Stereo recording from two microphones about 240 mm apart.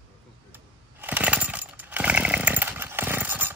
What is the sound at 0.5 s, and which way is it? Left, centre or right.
Chainsaw, centre.